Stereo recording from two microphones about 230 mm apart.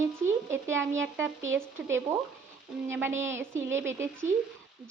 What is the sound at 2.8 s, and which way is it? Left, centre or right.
Speech, centre.